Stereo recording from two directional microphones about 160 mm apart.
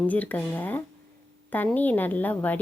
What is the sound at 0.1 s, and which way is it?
A woman's voice, 10° left (ahead or behind).